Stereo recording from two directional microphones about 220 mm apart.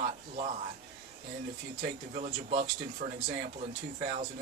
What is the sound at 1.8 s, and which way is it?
Speech, 35° right (ahead or behind).